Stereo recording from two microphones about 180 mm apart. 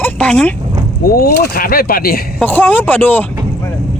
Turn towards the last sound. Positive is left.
turn(degrees=10)  # may be behind; listen again after turning